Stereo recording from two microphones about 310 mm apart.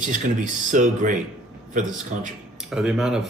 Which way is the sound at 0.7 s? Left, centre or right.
Right.